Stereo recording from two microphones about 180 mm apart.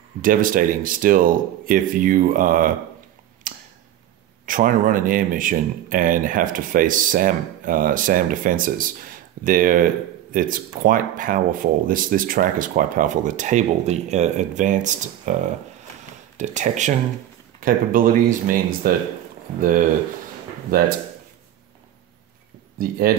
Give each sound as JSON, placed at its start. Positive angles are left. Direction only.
{"t": 0.2, "sound": "speech", "side_deg": -50}
{"t": 3.4, "sound": "a sound", "side_deg": -50}
{"t": 4.5, "sound": "speech", "side_deg": -50}
{"t": 16.3, "sound": "speech", "side_deg": -40}
{"t": 22.8, "sound": "speech", "side_deg": -55}